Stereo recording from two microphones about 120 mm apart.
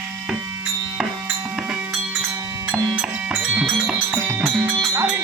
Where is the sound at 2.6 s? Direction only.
5° right (ahead or behind).